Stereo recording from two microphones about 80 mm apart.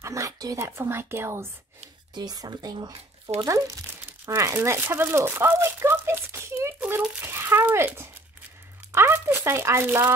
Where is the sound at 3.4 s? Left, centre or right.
Right.